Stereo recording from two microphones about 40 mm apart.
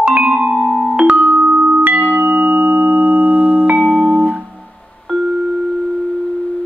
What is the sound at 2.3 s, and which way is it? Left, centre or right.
Tuning fork, right.